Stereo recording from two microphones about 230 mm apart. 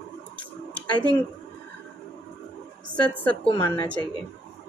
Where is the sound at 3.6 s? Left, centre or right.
Centre.